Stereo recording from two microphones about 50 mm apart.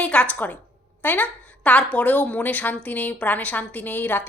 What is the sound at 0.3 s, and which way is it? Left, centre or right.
A woman's voice, left.